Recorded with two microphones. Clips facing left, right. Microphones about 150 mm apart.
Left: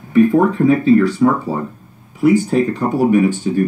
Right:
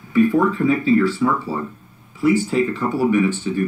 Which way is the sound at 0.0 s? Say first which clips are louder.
Left 4 dB; 45° left (ahead or behind).